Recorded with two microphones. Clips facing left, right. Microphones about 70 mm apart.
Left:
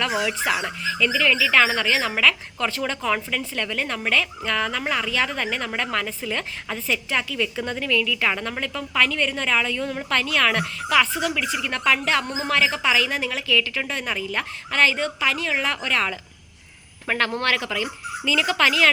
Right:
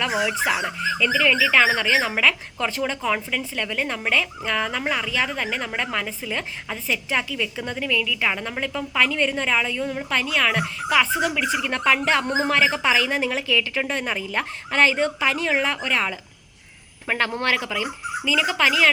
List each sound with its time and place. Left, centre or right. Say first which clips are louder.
0.0 s speech: right 1 dB; centre